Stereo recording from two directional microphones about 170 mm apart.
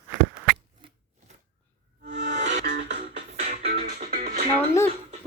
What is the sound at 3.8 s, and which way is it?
Music, 55° right (ahead or behind).